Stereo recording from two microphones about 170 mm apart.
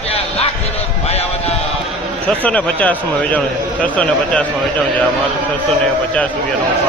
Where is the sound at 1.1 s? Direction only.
35° left (ahead or behind).